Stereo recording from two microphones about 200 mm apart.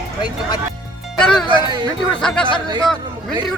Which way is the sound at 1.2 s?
5° left (ahead or behind).